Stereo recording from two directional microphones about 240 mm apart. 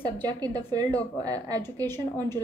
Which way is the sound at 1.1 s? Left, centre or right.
Centre.